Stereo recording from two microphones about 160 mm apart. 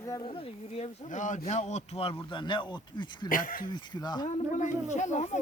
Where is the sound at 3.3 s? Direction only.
60° left (ahead or behind).